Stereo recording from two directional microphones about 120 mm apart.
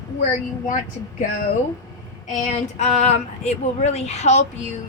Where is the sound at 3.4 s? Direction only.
65° left (ahead or behind).